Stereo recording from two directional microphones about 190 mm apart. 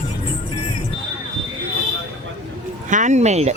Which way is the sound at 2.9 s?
40° right (ahead or behind).